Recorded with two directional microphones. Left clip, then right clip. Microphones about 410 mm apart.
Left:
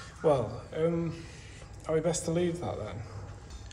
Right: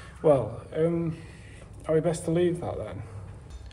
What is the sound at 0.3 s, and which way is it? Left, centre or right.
A man's voice, centre.